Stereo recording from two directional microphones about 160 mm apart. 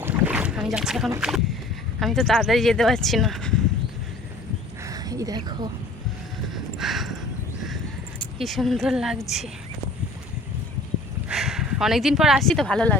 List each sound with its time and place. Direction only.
0.0 s boat: 10° right (ahead or behind)
2.0 s speech: centre (ahead or behind)
4.8 s a sound: 20° right (ahead or behind)
6.5 s horse: centre (ahead or behind)
8.4 s speech: centre (ahead or behind)
11.3 s speech: 5° right (ahead or behind)